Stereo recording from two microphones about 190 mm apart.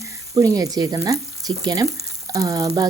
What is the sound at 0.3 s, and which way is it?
Speech, 20° right (ahead or behind).